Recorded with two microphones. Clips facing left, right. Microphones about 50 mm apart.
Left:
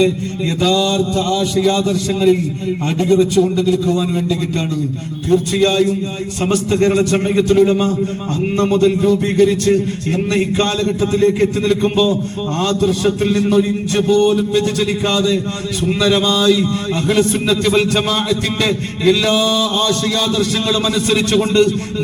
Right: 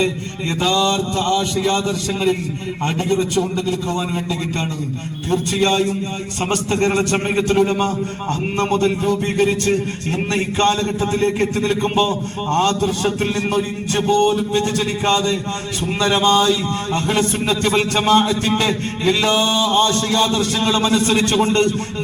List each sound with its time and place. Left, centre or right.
0.6 s a man's voice: right
5.5 s a man's voice: right